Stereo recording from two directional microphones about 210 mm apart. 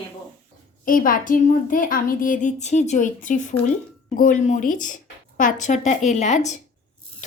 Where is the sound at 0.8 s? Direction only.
40° left (ahead or behind).